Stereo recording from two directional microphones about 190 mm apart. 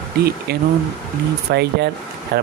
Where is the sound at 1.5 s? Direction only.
60° right (ahead or behind).